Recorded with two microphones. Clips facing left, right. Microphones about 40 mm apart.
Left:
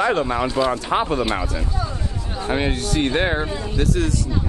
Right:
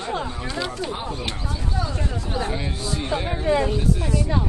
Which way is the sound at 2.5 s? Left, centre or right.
Left.